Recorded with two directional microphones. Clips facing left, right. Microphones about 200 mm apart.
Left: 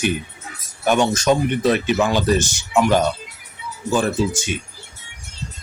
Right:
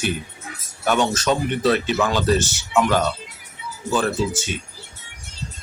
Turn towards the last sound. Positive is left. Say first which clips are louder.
# left 2 dB
turn(degrees=15)  # may be behind; listen again after turning